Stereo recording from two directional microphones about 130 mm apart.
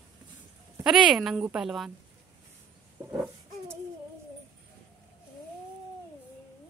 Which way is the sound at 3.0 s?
15° right (ahead or behind).